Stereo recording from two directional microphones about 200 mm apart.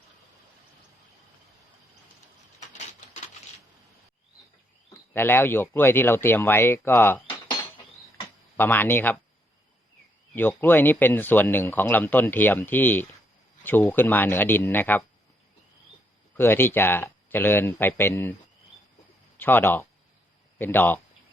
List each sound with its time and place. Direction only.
2.6 s a sound: 35° left (ahead or behind)
5.1 s speech: 10° left (ahead or behind)
10.3 s speech: 10° left (ahead or behind)
16.4 s speech: 10° left (ahead or behind)
19.4 s speech: 10° left (ahead or behind)